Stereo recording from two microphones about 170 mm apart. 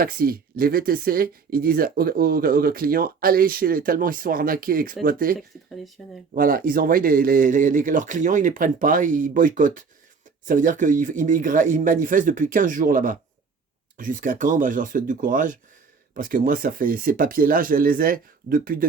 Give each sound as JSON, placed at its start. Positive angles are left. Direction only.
{"t": 0.0, "sound": "speech", "side_deg": -60}
{"t": 5.4, "sound": "speech", "side_deg": 0}
{"t": 6.3, "sound": "speech", "side_deg": -55}